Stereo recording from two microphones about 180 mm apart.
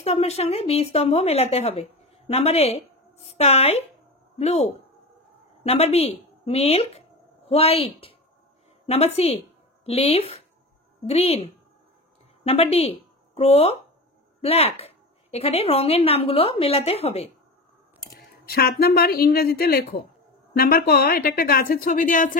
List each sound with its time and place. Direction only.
0.0 s a woman's voice: 35° left (ahead or behind)
18.5 s a woman's voice: 60° left (ahead or behind)